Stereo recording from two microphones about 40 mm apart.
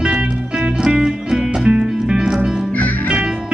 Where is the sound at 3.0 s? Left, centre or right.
Right.